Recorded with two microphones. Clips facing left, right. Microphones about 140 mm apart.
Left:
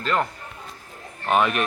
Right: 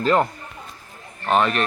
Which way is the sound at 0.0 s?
30° right (ahead or behind).